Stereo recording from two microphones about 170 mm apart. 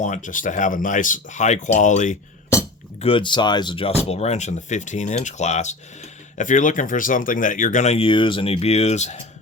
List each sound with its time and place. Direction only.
0.0 s speech: 45° left (ahead or behind)
3.0 s speech: 30° left (ahead or behind)
4.1 s speech: 40° left (ahead or behind)